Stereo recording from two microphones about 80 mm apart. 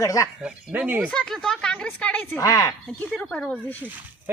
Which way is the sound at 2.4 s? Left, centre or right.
Left.